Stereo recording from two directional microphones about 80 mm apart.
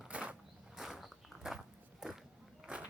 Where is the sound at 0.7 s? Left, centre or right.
Centre.